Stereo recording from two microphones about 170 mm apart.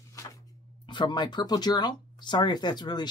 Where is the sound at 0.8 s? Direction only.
25° left (ahead or behind).